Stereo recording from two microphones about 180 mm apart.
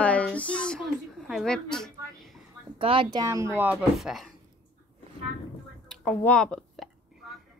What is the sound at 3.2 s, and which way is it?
Speech, 15° right (ahead or behind).